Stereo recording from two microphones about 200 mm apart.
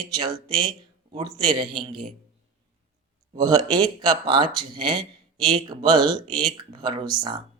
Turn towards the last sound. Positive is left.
turn(degrees=-25)  # may be behind; listen again after turning